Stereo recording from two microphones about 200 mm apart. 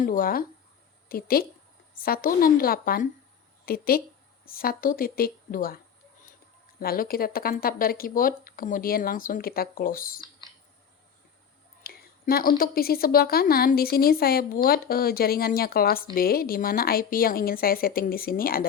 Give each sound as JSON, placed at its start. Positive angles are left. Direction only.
{"t": 0.0, "sound": "a woman's voice", "side_deg": 45}
{"t": 11.8, "sound": "a woman's voice", "side_deg": 50}